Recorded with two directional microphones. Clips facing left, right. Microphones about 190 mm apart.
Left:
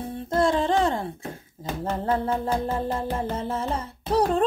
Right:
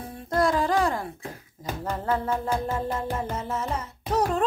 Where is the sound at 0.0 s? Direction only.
30° left (ahead or behind).